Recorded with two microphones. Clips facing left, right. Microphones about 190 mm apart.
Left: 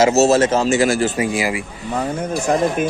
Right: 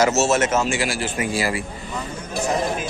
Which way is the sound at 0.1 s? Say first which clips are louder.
Left 5 dB; 35° left (ahead or behind).